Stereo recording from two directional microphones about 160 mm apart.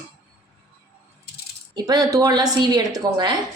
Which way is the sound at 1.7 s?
25° right (ahead or behind).